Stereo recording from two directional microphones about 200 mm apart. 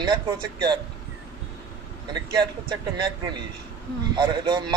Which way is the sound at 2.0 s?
20° right (ahead or behind).